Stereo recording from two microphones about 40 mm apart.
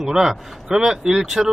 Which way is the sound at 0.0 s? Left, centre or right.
Centre.